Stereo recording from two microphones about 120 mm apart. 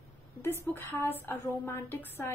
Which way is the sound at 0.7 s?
20° left (ahead or behind).